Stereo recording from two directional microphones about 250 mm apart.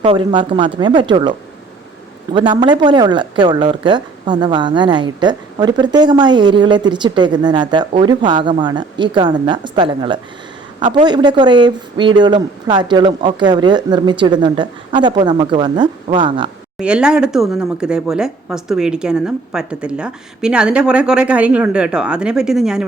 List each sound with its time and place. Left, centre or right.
0.0 s speech: right
2.3 s speech: centre
16.7 s a woman's voice: centre